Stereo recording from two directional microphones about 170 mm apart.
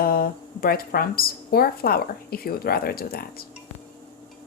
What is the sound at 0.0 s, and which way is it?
A woman's voice, 60° left (ahead or behind).